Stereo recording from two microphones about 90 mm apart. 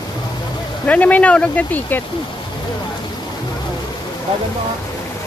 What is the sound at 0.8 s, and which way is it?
Speech, 15° left (ahead or behind).